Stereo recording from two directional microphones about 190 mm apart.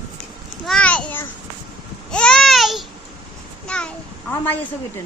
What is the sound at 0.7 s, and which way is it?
Speech, 5° left (ahead or behind).